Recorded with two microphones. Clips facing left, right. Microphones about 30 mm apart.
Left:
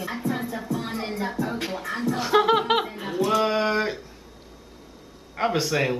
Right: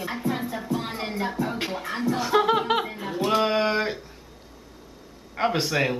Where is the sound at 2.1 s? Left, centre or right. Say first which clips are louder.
Left 2 dB; centre.